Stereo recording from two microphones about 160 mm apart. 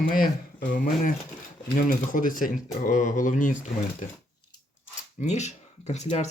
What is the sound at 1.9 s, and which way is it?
Speech, 55° left (ahead or behind).